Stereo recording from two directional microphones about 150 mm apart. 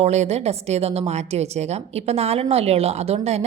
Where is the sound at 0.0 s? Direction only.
45° right (ahead or behind).